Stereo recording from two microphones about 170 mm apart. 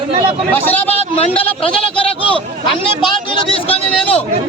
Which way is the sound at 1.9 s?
30° left (ahead or behind).